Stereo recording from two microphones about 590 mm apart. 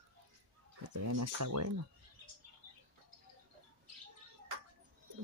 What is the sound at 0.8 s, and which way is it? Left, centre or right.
Speech, right.